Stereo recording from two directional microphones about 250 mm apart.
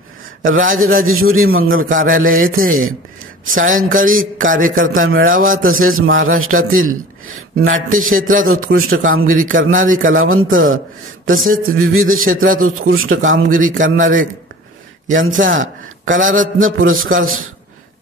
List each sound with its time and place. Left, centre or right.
0.4 s a man's voice: right
15.1 s a man's voice: right